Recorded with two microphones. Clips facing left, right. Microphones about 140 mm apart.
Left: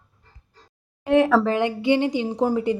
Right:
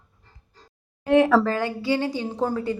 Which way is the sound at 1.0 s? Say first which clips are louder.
Even; centre (ahead or behind).